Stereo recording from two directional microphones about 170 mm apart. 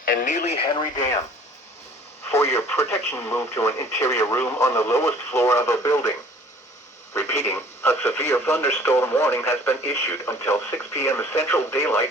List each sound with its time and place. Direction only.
0.0 s speech: 55° left (ahead or behind); by 1.2 s 20° left (ahead or behind)
2.3 s speech: 15° left (ahead or behind)
7.1 s speech: 15° left (ahead or behind)